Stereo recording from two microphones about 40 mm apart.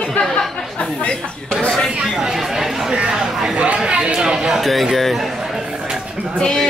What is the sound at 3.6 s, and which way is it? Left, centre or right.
Speech, right.